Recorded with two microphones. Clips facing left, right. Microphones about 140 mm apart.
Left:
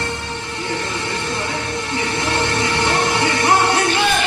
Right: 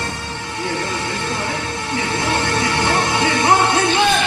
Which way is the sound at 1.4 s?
20° left (ahead or behind).